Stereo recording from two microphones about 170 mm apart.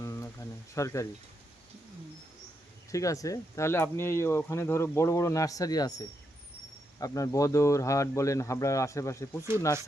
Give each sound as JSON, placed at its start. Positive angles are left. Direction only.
{"t": 0.0, "sound": "a sound", "side_deg": 20}
{"t": 2.9, "sound": "speech", "side_deg": 20}
{"t": 7.0, "sound": "speech", "side_deg": 20}